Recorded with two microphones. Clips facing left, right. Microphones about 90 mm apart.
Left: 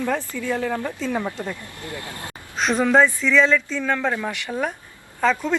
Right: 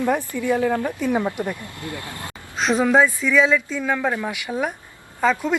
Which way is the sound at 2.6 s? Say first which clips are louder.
Even; centre (ahead or behind).